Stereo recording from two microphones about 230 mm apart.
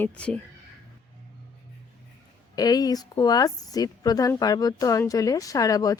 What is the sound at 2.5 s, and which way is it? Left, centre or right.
A woman's voice, centre.